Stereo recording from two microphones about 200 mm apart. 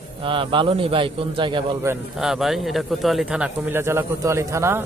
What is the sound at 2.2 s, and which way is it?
Speech, centre (ahead or behind).